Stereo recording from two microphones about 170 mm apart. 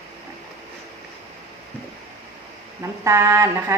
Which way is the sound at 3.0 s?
15° right (ahead or behind).